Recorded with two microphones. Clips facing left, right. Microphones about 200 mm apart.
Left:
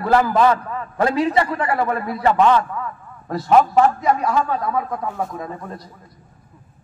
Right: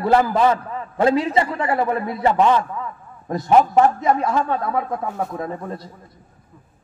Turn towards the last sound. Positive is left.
turn(degrees=-25)  # may be behind; listen again after turning